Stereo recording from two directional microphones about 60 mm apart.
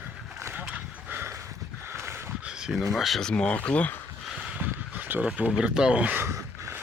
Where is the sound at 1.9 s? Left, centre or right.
Right.